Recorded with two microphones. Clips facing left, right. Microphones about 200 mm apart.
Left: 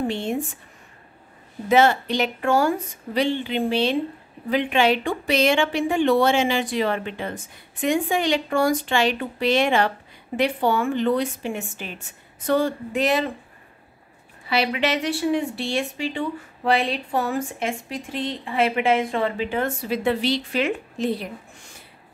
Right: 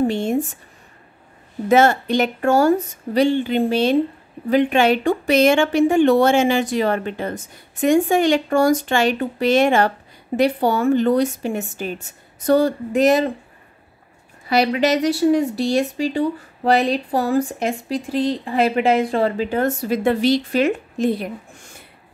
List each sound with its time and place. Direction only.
0.1 s speech: 45° right (ahead or behind)
1.7 s speech: 45° right (ahead or behind)
14.5 s a woman's voice: 40° right (ahead or behind)